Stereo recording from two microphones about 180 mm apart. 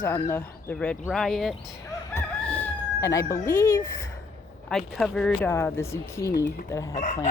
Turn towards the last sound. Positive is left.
turn(degrees=40)  # may be behind; listen again after turning